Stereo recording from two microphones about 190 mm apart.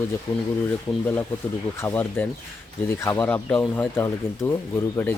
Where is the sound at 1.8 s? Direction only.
10° left (ahead or behind).